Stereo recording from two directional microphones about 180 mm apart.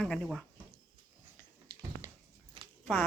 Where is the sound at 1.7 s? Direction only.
15° right (ahead or behind).